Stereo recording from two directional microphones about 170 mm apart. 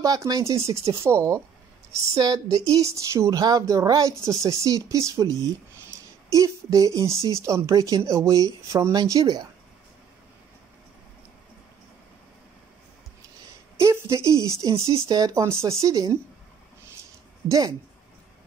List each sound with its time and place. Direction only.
0.0 s speech: 20° right (ahead or behind)
13.7 s a sound: 15° right (ahead or behind)
14.5 s speech: 20° right (ahead or behind)
17.5 s speech: 20° right (ahead or behind)